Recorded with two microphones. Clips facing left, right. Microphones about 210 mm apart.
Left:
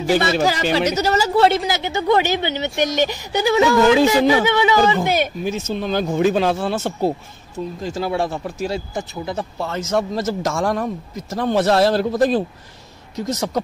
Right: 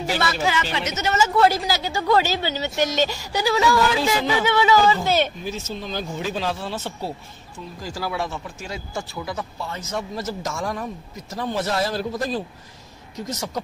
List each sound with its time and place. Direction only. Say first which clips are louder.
0.4 s a woman's voice: left 6 dB; 35° left (ahead or behind); by 5.3 s 15° left (ahead or behind)
5.4 s speech: left 7 dB; 65° left (ahead or behind); by 7.6 s 45° left (ahead or behind)
7.8 s a woman's voice: left 5 dB; 25° left (ahead or behind)
8.9 s speech: left 4 dB; 25° left (ahead or behind)
9.7 s a man's voice: left 12 dB; 85° left; by 13.6 s 65° left (ahead or behind)